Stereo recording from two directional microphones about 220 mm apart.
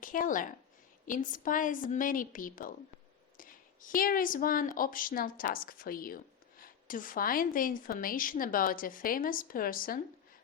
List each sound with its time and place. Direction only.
0.0 s a woman's voice: 40° left (ahead or behind)